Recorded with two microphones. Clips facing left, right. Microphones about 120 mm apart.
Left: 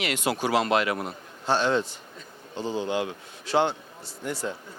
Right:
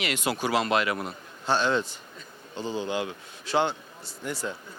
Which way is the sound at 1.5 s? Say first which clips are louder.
Left 1 dB; 50° left (ahead or behind).